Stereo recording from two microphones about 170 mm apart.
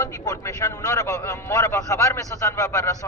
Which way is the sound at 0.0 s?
15° left (ahead or behind).